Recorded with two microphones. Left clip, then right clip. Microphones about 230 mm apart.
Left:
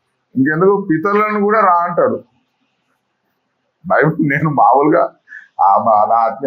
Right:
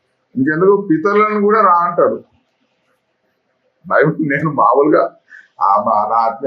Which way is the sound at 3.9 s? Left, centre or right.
Left.